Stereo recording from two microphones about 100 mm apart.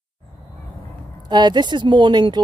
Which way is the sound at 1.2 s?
45° right (ahead or behind).